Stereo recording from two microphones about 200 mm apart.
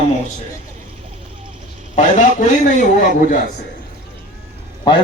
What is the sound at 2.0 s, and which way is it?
A man's voice, 35° left (ahead or behind).